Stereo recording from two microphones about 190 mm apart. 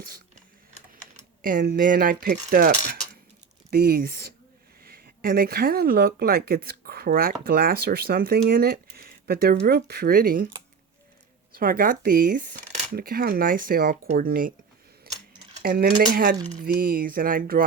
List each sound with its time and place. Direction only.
1.1 s speech: 45° right (ahead or behind)
11.5 s speech: 50° right (ahead or behind)
15.1 s a sound: 50° right (ahead or behind)
15.6 s speech: 50° right (ahead or behind)